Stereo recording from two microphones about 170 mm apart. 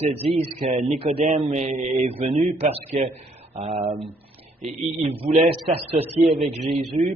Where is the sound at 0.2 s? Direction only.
35° right (ahead or behind).